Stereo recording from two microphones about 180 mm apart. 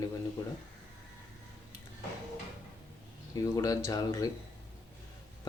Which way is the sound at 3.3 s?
20° left (ahead or behind).